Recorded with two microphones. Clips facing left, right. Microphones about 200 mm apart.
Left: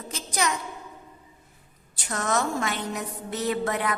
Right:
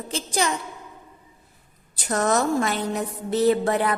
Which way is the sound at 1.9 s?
35° right (ahead or behind).